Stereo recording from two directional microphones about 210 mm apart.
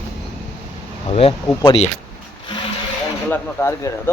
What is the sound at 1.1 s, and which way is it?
Speech, 30° left (ahead or behind).